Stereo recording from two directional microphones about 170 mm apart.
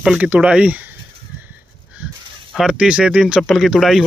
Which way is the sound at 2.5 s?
5° right (ahead or behind).